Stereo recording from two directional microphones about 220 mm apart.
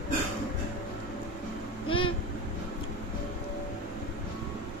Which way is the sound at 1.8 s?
25° left (ahead or behind).